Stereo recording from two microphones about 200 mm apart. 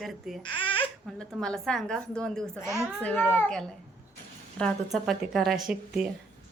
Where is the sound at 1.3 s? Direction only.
Centre (ahead or behind).